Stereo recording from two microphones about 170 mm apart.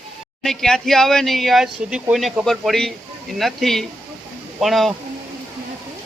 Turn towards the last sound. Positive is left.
turn(degrees=0)  # may be behind; listen again after turning